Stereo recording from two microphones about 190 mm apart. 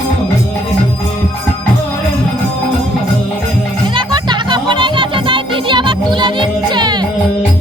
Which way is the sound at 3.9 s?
25° right (ahead or behind).